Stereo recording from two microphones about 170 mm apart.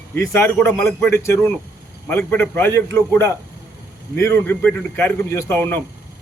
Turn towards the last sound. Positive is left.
turn(degrees=10)  # may be behind; listen again after turning